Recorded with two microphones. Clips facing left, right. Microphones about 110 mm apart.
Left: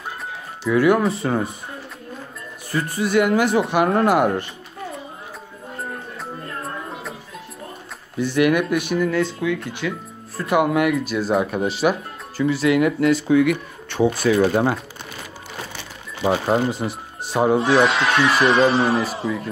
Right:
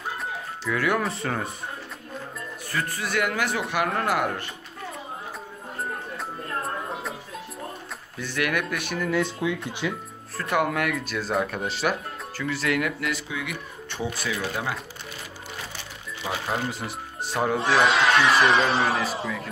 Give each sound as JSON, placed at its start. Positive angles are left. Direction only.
{"t": 0.7, "sound": "speech", "side_deg": 15}
{"t": 2.7, "sound": "speech", "side_deg": 20}
{"t": 6.6, "sound": "music", "side_deg": 0}
{"t": 8.2, "sound": "speech", "side_deg": 15}
{"t": 9.0, "sound": "speech", "side_deg": -5}
{"t": 10.3, "sound": "speech", "side_deg": 10}
{"t": 13.3, "sound": "speech", "side_deg": 55}
{"t": 14.2, "sound": "speech", "side_deg": 45}
{"t": 16.4, "sound": "speech", "side_deg": 25}
{"t": 17.6, "sound": "speech", "side_deg": 0}